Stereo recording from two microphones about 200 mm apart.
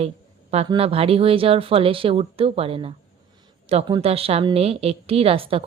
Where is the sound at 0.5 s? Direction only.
30° right (ahead or behind).